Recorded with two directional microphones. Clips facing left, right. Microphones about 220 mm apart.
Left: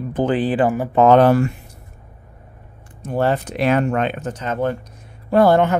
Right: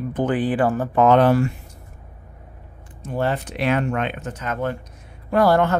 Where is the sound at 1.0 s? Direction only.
40° left (ahead or behind).